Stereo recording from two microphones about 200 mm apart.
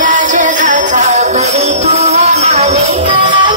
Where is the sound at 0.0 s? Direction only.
40° right (ahead or behind).